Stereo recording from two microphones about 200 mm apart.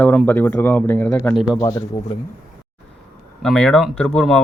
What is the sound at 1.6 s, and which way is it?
Speech, 20° left (ahead or behind).